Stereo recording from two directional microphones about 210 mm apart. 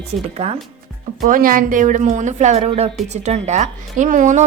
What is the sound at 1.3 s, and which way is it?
Speech, 40° right (ahead or behind).